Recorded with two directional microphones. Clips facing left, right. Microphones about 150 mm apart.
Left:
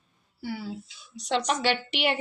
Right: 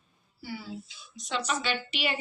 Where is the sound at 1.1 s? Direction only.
70° left (ahead or behind).